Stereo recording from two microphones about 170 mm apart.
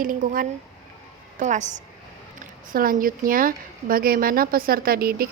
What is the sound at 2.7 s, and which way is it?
A woman's voice, 55° right (ahead or behind).